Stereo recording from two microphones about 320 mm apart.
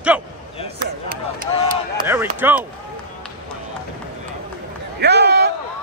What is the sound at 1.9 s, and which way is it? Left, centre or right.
Run, centre.